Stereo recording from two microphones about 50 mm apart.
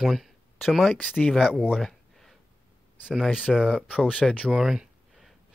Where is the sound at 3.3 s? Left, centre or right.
Centre.